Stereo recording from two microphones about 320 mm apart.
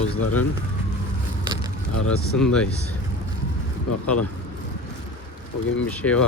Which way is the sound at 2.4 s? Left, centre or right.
Centre.